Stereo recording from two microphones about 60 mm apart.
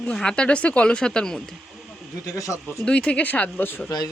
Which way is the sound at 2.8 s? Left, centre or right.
Left.